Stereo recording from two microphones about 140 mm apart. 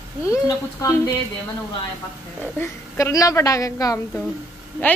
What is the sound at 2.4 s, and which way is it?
Speech, 15° left (ahead or behind).